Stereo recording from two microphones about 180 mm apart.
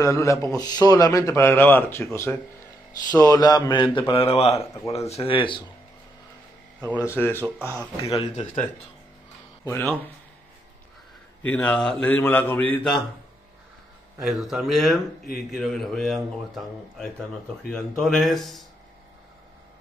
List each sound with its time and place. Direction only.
0.0 s a man's voice: 15° left (ahead or behind)
7.1 s speech: 10° left (ahead or behind)
7.4 s speech: 10° right (ahead or behind)
8.1 s speech: 30° left (ahead or behind)
9.7 s speech: 10° left (ahead or behind)
11.4 s speech: 10° left (ahead or behind)
14.2 s a man's voice: 5° right (ahead or behind)